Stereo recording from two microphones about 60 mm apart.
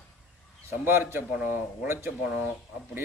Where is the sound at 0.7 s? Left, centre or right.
Right.